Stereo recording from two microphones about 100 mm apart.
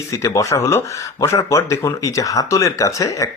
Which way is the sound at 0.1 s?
35° left (ahead or behind).